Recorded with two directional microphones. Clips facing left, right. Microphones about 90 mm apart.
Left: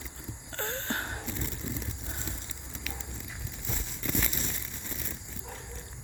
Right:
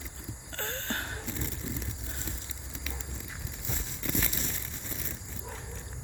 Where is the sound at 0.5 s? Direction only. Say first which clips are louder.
Left 2 dB; 5° left (ahead or behind).